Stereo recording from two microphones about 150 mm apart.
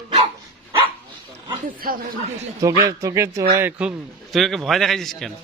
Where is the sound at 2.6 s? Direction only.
25° right (ahead or behind); by 5.3 s centre (ahead or behind).